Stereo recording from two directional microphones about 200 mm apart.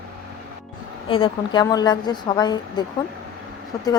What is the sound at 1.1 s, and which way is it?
A woman's voice, 25° left (ahead or behind).